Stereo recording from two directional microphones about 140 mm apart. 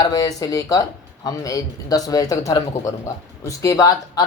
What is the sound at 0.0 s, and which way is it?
Speech, 25° left (ahead or behind).